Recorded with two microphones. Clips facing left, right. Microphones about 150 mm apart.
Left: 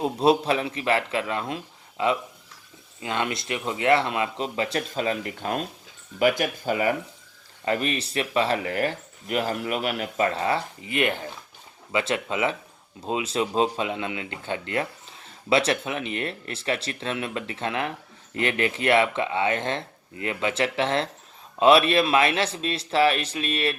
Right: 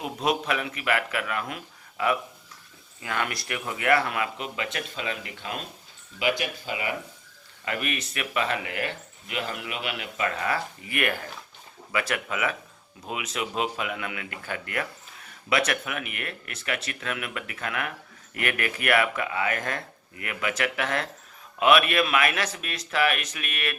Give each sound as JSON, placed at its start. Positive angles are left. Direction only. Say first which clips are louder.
{"t": 0.0, "sound": "speech", "louder": "left 6 dB", "side_deg": 30}
{"t": 7.6, "sound": "speech", "louder": "left 5 dB", "side_deg": 30}